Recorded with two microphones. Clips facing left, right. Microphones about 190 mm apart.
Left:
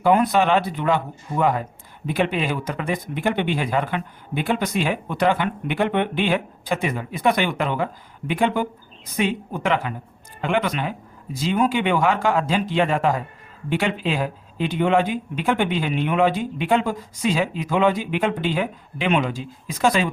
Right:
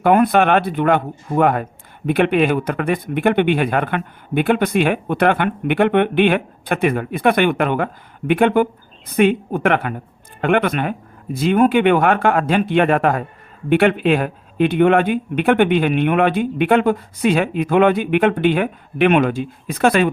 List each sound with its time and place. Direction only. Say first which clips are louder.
0.0 s speech: right 4 dB; 55° right (ahead or behind)